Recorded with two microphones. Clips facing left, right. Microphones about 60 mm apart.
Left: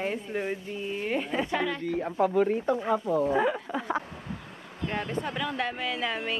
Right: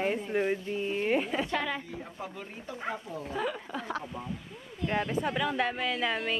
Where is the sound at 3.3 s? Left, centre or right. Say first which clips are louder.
Left 7 dB; left.